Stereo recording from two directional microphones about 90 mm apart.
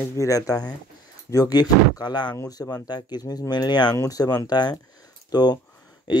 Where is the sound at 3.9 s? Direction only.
40° left (ahead or behind).